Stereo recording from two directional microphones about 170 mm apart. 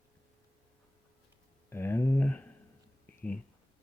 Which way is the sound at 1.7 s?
15° left (ahead or behind).